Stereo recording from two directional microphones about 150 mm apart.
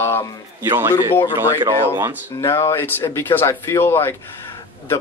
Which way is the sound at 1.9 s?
15° right (ahead or behind).